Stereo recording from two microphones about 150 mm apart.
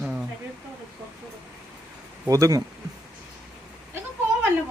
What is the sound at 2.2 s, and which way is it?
Speech, 20° right (ahead or behind).